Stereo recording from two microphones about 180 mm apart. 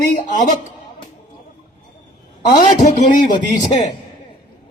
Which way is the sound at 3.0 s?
45° left (ahead or behind).